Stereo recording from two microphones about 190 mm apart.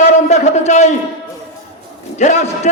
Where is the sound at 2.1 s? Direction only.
35° left (ahead or behind).